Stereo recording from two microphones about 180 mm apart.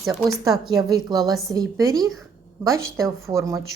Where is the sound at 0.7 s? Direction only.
20° right (ahead or behind).